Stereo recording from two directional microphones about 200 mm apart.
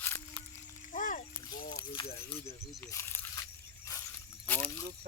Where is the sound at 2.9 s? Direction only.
10° left (ahead or behind).